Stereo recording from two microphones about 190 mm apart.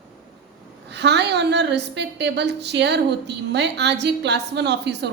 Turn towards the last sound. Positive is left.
turn(degrees=-65)  # may be behind; listen again after turning